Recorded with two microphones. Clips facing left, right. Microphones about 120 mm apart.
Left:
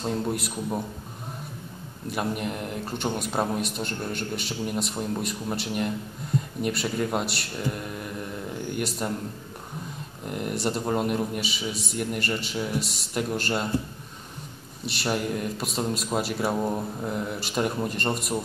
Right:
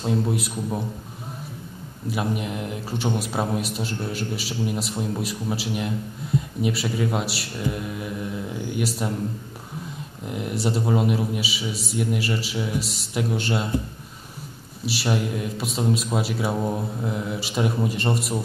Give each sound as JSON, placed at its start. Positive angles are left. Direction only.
{"t": 0.0, "sound": "a man's voice", "side_deg": -5}
{"t": 2.0, "sound": "a man's voice", "side_deg": 0}
{"t": 10.2, "sound": "a man's voice", "side_deg": 0}
{"t": 14.9, "sound": "a man's voice", "side_deg": 0}